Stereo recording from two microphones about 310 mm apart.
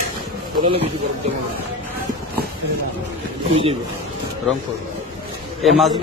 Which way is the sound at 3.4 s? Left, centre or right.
Centre.